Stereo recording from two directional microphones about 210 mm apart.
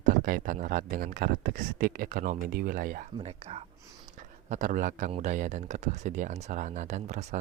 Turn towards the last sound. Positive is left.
turn(degrees=-35)  # may be behind; listen again after turning